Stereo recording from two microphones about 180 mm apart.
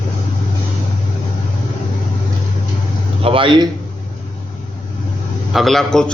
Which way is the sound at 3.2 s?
30° right (ahead or behind).